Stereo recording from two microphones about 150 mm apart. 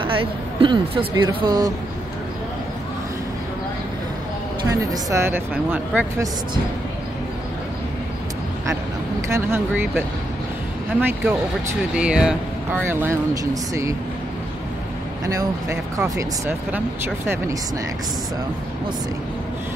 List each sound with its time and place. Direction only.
0.0 s speech: 35° right (ahead or behind)
4.6 s speech: 20° right (ahead or behind)
9.3 s speech: 15° right (ahead or behind)
11.9 s speech: 5° right (ahead or behind)
15.2 s speech: 20° right (ahead or behind)